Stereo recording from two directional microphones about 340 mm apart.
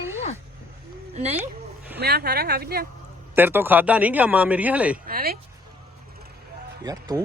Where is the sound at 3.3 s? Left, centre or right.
Centre.